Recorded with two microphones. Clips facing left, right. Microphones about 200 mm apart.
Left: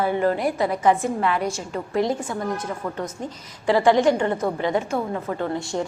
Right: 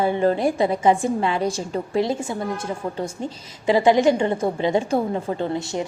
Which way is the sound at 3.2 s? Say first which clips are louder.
Right 2 dB; 20° right (ahead or behind).